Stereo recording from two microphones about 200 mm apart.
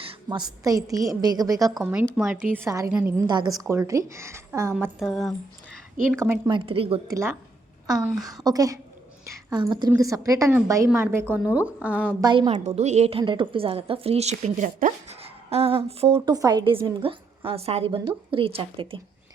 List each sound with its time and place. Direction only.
0.0 s a woman's voice: 25° right (ahead or behind)
1.8 s a woman's voice: 5° right (ahead or behind)
2.5 s a woman's voice: 15° right (ahead or behind)
3.2 s a woman's voice: 20° right (ahead or behind)
4.8 s a woman's voice: centre (ahead or behind)
6.1 s a woman's voice: 10° right (ahead or behind)
6.5 s a woman's voice: 25° right (ahead or behind)
7.1 s a woman's voice: 15° right (ahead or behind)
8.4 s a woman's voice: 15° right (ahead or behind)
12.2 s a woman's voice: 25° right (ahead or behind)